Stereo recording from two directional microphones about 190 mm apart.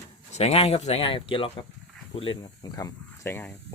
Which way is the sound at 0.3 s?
35° left (ahead or behind).